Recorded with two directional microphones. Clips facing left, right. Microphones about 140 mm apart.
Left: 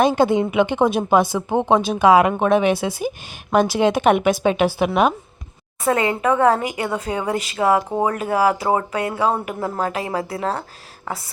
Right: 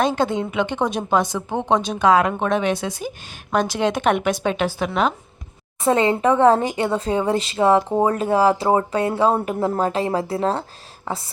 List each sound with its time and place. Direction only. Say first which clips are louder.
0.0 s speech: left 4 dB; 10° left (ahead or behind)
5.8 s speech: right 2 dB; 25° right (ahead or behind)